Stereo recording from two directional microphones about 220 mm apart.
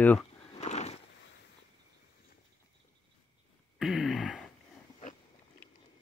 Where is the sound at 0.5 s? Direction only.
30° left (ahead or behind).